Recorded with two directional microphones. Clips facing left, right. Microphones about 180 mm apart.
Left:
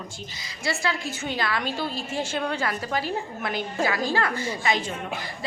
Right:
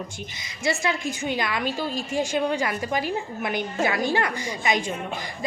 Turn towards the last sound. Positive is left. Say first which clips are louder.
# even
turn(degrees=-15)  # may be behind; listen again after turning